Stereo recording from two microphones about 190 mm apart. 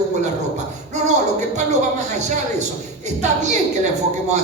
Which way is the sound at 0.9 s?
40° right (ahead or behind).